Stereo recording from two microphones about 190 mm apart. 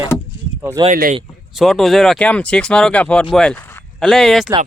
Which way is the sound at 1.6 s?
Centre (ahead or behind).